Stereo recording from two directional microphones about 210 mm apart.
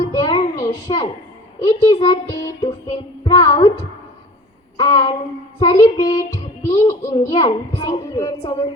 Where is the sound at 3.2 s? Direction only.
20° left (ahead or behind).